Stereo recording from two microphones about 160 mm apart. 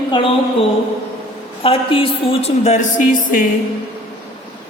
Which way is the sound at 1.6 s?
35° left (ahead or behind).